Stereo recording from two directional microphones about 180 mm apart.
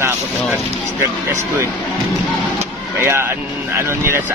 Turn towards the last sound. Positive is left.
turn(degrees=-15)  # may be behind; listen again after turning